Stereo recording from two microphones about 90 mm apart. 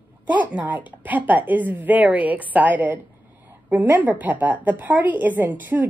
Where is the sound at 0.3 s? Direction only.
20° right (ahead or behind).